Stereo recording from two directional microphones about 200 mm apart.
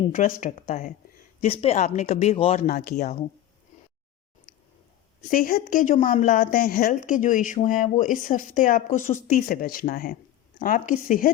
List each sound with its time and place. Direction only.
0.1 s speech: 40° left (ahead or behind)
1.4 s speech: 30° left (ahead or behind)
2.6 s speech: 40° left (ahead or behind)
5.3 s a woman's voice: 45° left (ahead or behind)